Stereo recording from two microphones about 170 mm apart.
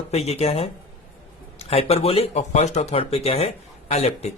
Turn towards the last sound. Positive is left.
turn(degrees=40)  # may be behind; listen again after turning